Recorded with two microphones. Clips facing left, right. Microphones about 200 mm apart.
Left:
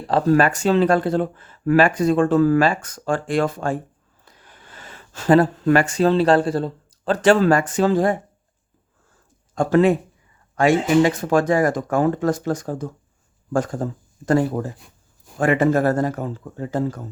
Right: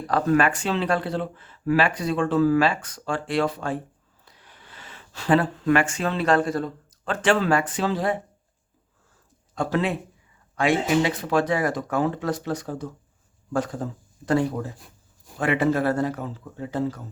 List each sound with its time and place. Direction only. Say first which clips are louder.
0.1 s speech: left 4 dB; 35° left (ahead or behind)
9.6 s speech: left 8 dB; 45° left (ahead or behind)